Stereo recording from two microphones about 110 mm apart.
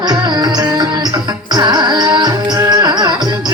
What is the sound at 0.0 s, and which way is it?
Music, 40° right (ahead or behind).